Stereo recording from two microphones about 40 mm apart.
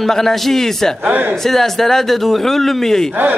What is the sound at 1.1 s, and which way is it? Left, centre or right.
Speech, right.